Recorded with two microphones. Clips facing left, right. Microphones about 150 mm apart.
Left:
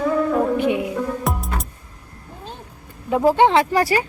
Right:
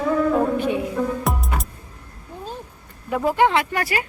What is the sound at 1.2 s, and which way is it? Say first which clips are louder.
Music: even; centre (ahead or behind).